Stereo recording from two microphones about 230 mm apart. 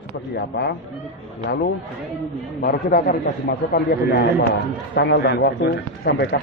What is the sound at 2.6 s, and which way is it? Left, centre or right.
A man's voice, left.